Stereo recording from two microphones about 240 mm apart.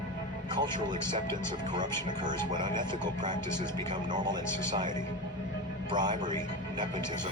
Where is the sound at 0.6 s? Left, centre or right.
Centre.